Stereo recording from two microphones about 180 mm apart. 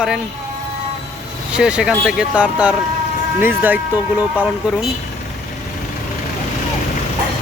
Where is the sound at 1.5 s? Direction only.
5° right (ahead or behind).